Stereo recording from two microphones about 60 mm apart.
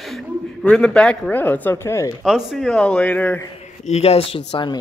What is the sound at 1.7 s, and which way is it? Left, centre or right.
Speech, left.